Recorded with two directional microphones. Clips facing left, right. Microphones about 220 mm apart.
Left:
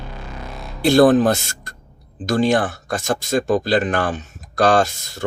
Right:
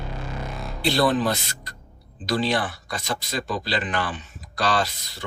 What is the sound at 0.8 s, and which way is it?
Speech, 50° left (ahead or behind).